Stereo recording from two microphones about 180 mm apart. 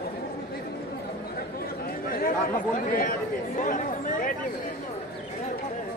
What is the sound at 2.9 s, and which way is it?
Speech, 50° left (ahead or behind).